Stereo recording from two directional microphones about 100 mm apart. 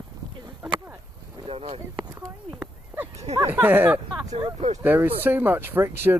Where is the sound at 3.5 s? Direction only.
20° right (ahead or behind).